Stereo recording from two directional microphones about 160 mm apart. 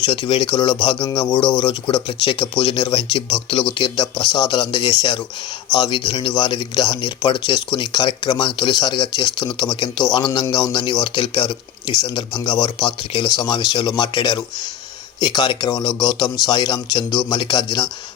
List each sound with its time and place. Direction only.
0.0 s speech: 30° left (ahead or behind)
12.6 s speech: 30° left (ahead or behind)